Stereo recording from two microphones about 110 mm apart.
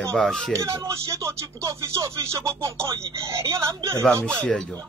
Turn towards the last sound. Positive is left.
turn(degrees=5)  # may be behind; listen again after turning